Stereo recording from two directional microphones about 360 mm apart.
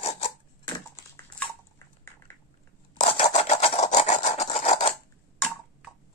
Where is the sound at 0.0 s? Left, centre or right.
Centre.